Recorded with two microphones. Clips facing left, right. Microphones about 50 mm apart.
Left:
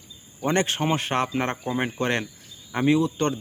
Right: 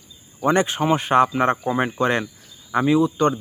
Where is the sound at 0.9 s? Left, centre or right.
Right.